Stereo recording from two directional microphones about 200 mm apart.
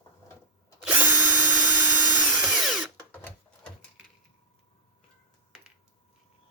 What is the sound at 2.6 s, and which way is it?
Drill, centre (ahead or behind).